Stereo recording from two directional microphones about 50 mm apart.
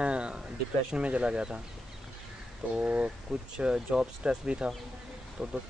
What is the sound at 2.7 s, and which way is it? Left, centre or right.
Speech, right.